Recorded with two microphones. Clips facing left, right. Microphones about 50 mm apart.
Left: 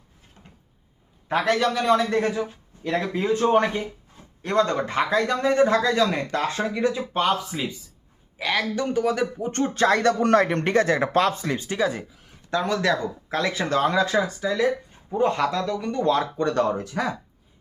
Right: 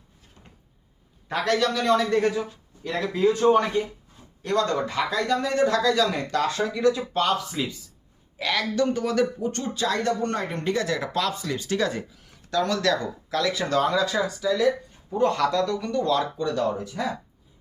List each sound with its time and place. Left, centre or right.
1.3 s speech: centre
2.8 s speech: left; by 9.2 s centre
9.4 s speech: left
10.0 s speech: left
10.7 s speech: left
11.8 s speech: centre
12.5 s speech: left
13.2 s speech: left
15.2 s speech: centre
16.0 s speech: left
16.4 s speech: left